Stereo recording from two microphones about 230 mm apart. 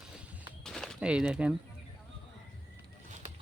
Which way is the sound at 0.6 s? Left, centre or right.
Centre.